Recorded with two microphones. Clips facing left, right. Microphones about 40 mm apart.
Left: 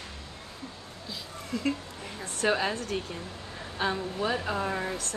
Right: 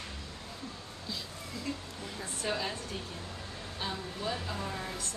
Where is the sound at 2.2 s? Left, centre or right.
Left.